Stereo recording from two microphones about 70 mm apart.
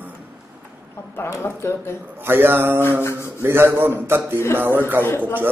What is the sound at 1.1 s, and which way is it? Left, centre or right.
Speech, left.